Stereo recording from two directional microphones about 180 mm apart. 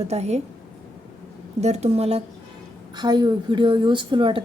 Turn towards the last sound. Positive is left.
turn(degrees=-30)  # may be behind; listen again after turning